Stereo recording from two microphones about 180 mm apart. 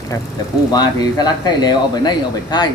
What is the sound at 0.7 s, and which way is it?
Speech, 20° left (ahead or behind).